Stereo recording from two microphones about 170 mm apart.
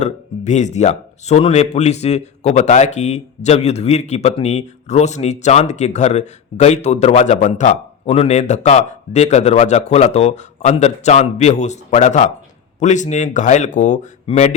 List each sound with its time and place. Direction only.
0.0 s speech: 45° left (ahead or behind)